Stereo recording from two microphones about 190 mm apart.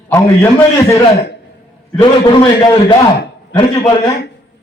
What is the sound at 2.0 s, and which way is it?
Speech, 25° left (ahead or behind).